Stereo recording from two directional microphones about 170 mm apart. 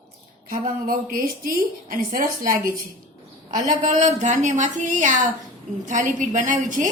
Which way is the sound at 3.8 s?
45° right (ahead or behind).